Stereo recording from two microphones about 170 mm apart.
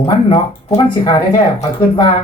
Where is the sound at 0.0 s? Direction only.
30° left (ahead or behind).